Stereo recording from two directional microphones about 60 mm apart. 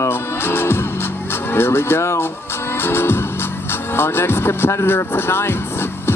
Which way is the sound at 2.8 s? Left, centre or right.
Left.